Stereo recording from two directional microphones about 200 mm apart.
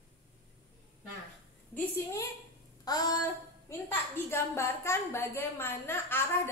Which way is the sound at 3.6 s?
10° left (ahead or behind).